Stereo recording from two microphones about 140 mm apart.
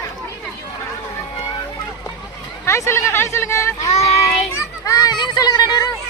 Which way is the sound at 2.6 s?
20° left (ahead or behind).